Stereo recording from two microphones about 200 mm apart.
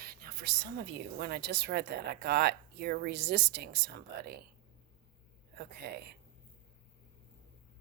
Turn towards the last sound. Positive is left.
turn(degrees=-55)  # may be behind; listen again after turning